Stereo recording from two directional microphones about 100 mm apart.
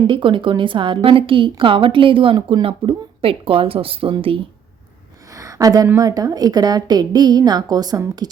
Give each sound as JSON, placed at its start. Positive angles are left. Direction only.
{"t": 0.1, "sound": "a woman's voice", "side_deg": -55}
{"t": 5.3, "sound": "a sound", "side_deg": -35}
{"t": 6.0, "sound": "a woman's voice", "side_deg": -40}